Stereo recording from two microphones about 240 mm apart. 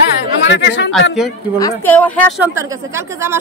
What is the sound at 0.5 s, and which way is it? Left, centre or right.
Speech, left.